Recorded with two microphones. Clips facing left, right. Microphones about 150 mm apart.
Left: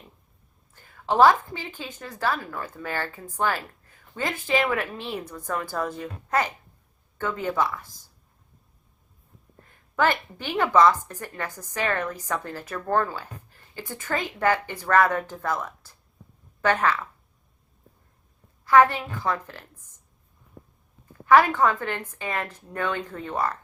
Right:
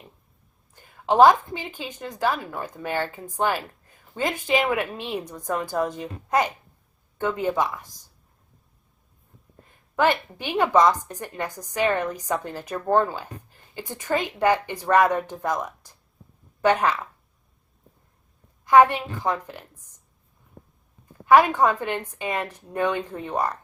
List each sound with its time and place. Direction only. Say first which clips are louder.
0.7 s a woman's voice: right 3 dB; 15° right (ahead or behind)
9.9 s a woman's voice: right 2 dB; 15° right (ahead or behind)
18.6 s a woman's voice: right 2 dB; 15° right (ahead or behind)
21.2 s a woman's voice: right 1 dB; 15° right (ahead or behind)